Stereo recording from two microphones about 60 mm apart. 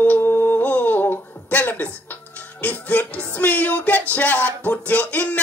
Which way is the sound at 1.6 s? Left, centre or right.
Left.